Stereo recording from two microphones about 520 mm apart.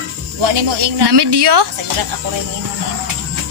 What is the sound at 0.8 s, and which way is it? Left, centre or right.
Speech, right.